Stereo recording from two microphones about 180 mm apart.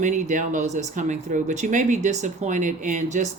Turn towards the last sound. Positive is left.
turn(degrees=-40)  # may be behind; listen again after turning